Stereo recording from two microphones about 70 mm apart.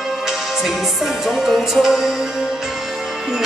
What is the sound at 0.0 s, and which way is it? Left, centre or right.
Music, centre.